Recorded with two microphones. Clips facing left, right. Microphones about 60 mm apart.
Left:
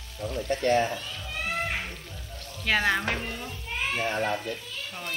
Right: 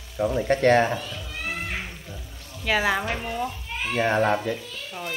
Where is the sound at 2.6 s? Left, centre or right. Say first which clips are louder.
Right 2 dB; centre.